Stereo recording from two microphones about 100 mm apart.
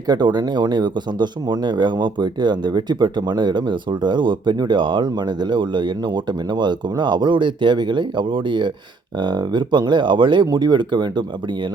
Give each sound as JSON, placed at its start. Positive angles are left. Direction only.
{"t": 0.1, "sound": "speech", "side_deg": -45}